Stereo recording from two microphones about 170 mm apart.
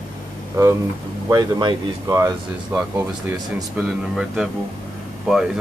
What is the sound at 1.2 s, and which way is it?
Speech, 20° right (ahead or behind).